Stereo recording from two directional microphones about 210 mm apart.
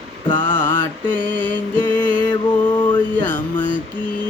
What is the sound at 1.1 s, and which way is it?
Mantra, 10° left (ahead or behind).